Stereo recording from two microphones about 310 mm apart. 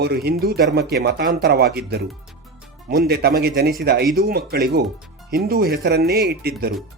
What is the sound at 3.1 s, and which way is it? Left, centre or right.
Speech, right.